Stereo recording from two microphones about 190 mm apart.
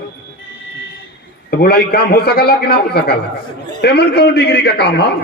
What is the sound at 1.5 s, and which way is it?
A man's voice, 55° left (ahead or behind).